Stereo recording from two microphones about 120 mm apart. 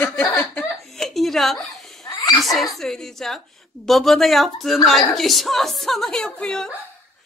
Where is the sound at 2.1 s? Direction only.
30° left (ahead or behind).